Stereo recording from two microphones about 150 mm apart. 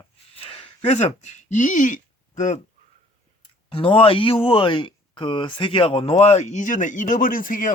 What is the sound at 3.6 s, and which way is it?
Speech, 35° left (ahead or behind).